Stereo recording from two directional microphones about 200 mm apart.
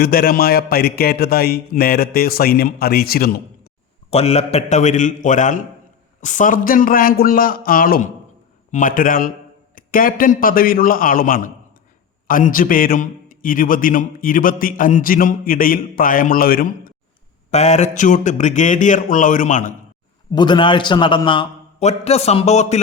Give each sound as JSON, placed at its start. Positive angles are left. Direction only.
{"t": 0.0, "sound": "a man's voice", "side_deg": 50}
{"t": 4.1, "sound": "a man's voice", "side_deg": 30}
{"t": 17.5, "sound": "a man's voice", "side_deg": 35}
{"t": 20.3, "sound": "a man's voice", "side_deg": 20}